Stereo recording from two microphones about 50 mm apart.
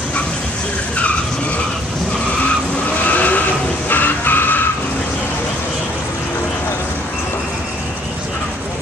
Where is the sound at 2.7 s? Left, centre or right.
Left.